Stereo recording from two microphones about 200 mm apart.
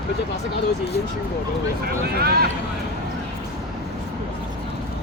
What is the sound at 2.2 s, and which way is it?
Speech, 50° right (ahead or behind).